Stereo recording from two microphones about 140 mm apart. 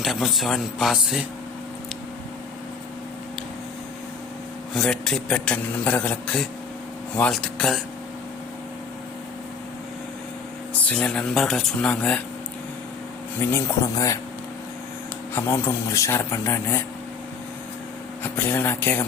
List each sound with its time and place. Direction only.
0.0 s speech: centre (ahead or behind)
4.7 s speech: centre (ahead or behind)
10.8 s speech: 5° left (ahead or behind)
13.4 s speech: 20° left (ahead or behind)
15.4 s speech: 15° left (ahead or behind)
18.2 s speech: 15° left (ahead or behind)